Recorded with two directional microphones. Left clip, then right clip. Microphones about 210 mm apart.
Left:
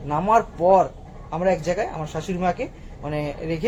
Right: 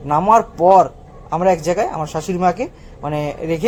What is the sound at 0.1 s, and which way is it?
A man's voice, 35° right (ahead or behind).